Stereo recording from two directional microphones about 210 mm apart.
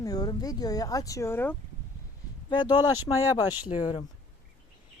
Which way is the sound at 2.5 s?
20° left (ahead or behind).